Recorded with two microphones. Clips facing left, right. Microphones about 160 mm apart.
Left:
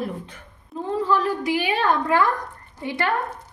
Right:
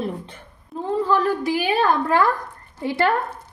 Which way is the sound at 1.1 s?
35° right (ahead or behind).